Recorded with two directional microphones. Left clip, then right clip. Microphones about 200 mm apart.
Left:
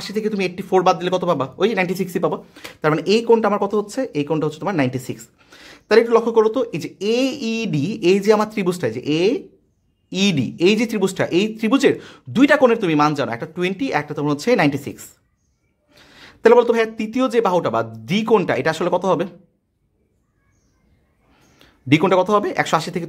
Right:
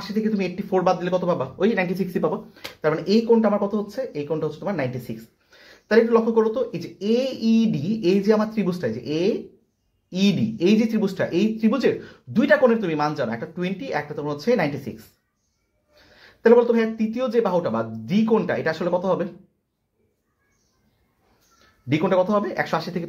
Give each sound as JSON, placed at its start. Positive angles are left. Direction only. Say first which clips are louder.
{"t": 0.0, "sound": "speech", "louder": "left 4 dB", "side_deg": 40}
{"t": 21.8, "sound": "speech", "louder": "left 5 dB", "side_deg": 45}